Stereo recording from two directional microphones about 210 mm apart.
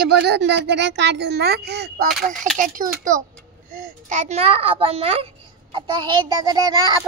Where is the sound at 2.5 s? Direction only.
40° right (ahead or behind).